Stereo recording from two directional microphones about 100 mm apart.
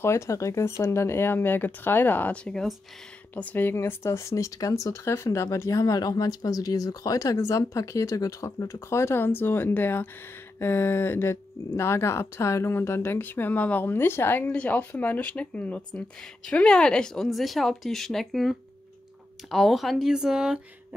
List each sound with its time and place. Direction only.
0.0 s speech: 30° left (ahead or behind); by 2.7 s 5° left (ahead or behind)
3.3 s speech: 20° left (ahead or behind); by 20.6 s 5° right (ahead or behind)